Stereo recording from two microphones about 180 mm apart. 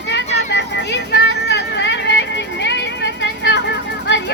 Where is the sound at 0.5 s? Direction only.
75° left (ahead or behind).